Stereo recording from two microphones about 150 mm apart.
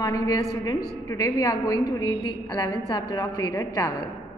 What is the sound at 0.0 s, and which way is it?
A woman's voice, 25° left (ahead or behind).